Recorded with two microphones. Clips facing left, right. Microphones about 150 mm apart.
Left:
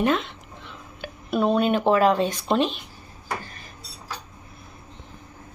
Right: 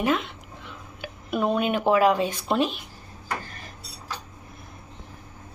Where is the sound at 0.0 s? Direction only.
5° right (ahead or behind).